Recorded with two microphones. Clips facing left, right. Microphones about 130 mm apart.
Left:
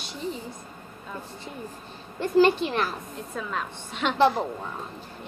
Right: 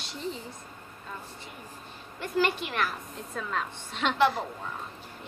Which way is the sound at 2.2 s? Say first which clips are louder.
Left 8 dB; 30° left (ahead or behind).